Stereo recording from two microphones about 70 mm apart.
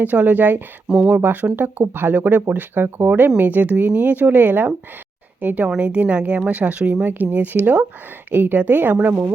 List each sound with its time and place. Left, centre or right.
0.0 s speech: right